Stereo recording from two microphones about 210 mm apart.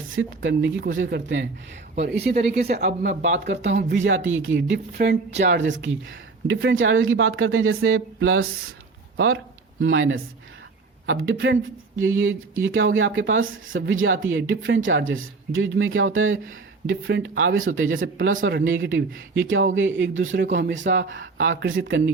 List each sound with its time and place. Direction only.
0.2 s speech: 60° right (ahead or behind)
3.0 s speech: 35° right (ahead or behind)
3.6 s speech: 55° right (ahead or behind)